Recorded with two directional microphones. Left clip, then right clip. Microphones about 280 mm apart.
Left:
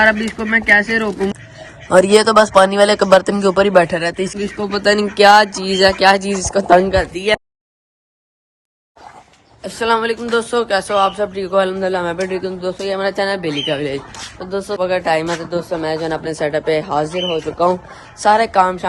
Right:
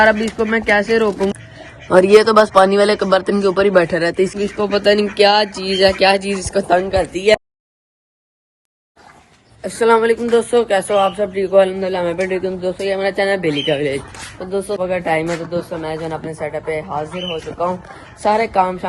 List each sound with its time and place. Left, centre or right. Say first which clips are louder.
0.0 s speech: right 1 dB; centre
4.7 s speech: even; centre
6.7 s speech: left 4 dB; left
7.0 s speech: right 3 dB; centre
9.6 s speech: right 3 dB; centre